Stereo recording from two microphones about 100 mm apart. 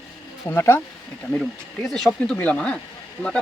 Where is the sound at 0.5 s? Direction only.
25° left (ahead or behind).